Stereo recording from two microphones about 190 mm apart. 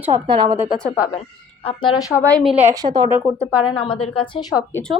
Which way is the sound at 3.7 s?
25° left (ahead or behind).